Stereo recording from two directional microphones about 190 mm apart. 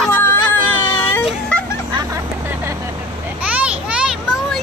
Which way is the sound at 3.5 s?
5° right (ahead or behind).